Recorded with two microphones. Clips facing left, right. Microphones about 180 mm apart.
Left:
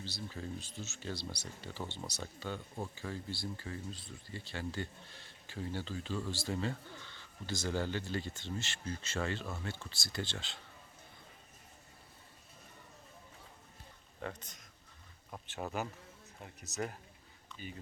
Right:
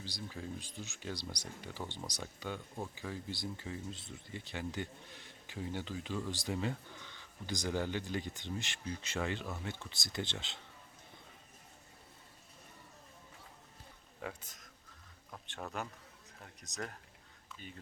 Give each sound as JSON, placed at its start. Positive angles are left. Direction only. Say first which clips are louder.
{"t": 0.0, "sound": "speech", "louder": "left 1 dB", "side_deg": -15}
{"t": 14.2, "sound": "speech", "louder": "left 1 dB", "side_deg": -5}